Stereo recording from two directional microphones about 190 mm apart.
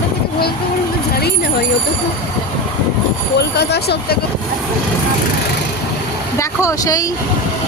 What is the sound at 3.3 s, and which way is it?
Speech, 60° left (ahead or behind).